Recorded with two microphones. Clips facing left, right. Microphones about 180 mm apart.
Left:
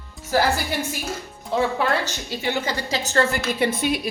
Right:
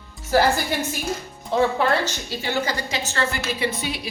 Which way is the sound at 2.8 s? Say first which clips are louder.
Left 3 dB; 35° left (ahead or behind).